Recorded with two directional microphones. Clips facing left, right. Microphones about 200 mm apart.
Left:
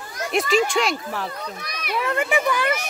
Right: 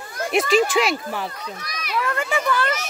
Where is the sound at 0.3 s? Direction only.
Centre (ahead or behind).